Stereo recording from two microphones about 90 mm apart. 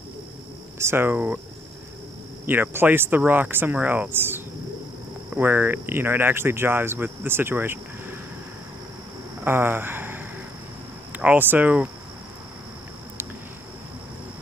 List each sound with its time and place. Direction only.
0.7 s speech: 25° right (ahead or behind)
2.4 s speech: 20° right (ahead or behind)
9.4 s speech: 25° right (ahead or behind)